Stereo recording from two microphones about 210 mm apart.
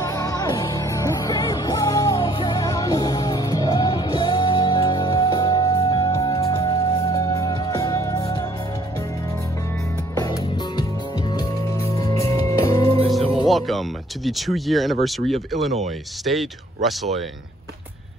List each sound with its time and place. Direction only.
0.0 s music: 15° left (ahead or behind)
10.1 s music: 20° left (ahead or behind)
13.5 s speech: centre (ahead or behind)